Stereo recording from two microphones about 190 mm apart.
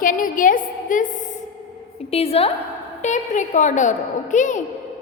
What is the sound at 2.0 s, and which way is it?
A woman's voice, 30° left (ahead or behind).